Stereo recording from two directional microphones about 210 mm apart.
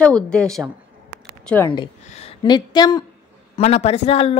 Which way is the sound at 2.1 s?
30° left (ahead or behind).